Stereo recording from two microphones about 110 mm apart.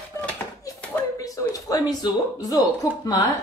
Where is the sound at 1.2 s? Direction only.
30° left (ahead or behind).